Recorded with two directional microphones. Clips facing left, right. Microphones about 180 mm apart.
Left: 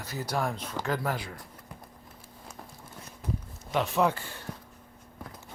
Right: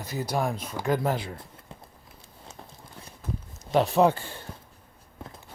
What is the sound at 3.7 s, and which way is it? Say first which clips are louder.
Speech: right 5 dB; 35° right (ahead or behind).